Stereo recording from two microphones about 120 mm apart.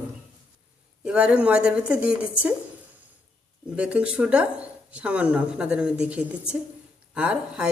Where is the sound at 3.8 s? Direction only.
10° right (ahead or behind).